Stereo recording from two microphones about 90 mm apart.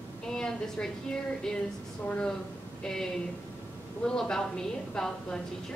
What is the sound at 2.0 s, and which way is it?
A woman's voice, 10° left (ahead or behind).